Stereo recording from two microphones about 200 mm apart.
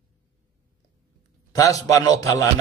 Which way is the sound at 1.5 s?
15° left (ahead or behind).